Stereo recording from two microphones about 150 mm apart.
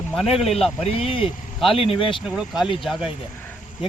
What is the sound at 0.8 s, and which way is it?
Speech, 40° left (ahead or behind).